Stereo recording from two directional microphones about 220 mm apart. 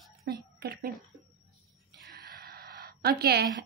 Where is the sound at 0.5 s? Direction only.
45° right (ahead or behind).